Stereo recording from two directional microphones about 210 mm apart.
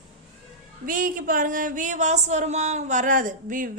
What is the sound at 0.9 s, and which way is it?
Speech, 40° right (ahead or behind).